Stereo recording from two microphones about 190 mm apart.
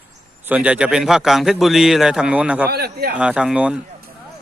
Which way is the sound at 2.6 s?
55° right (ahead or behind).